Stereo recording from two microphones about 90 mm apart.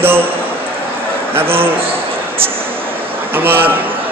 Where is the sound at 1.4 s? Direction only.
25° right (ahead or behind).